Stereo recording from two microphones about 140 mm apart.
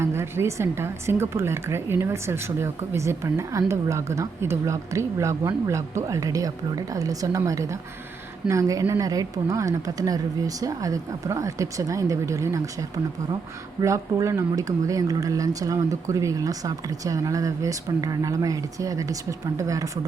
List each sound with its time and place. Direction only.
0.0 s a woman's voice: 20° right (ahead or behind)
13.8 s a woman's voice: 20° right (ahead or behind)